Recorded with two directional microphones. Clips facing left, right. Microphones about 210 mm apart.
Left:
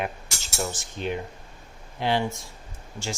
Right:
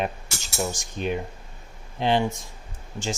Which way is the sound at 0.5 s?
15° right (ahead or behind).